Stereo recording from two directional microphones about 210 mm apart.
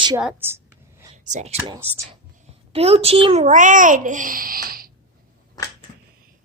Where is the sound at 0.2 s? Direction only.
5° right (ahead or behind).